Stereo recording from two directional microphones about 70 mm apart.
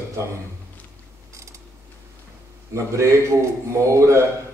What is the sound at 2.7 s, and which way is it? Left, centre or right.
A man's voice, right.